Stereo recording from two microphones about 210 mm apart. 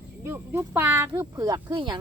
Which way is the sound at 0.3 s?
10° right (ahead or behind).